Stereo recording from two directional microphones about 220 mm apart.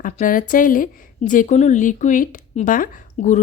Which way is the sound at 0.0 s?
40° left (ahead or behind).